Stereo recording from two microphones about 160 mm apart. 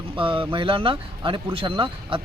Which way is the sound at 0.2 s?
30° right (ahead or behind).